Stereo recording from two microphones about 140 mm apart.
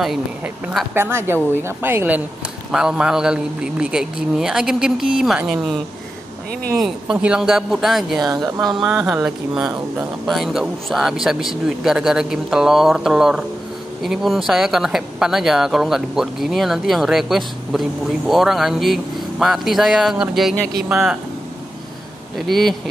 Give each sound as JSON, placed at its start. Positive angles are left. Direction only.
{"t": 0.9, "sound": "a woman's voice", "side_deg": -15}
{"t": 6.8, "sound": "speech", "side_deg": -5}
{"t": 8.2, "sound": "speech", "side_deg": -25}
{"t": 8.7, "sound": "speech", "side_deg": -5}
{"t": 22.5, "sound": "speech", "side_deg": 0}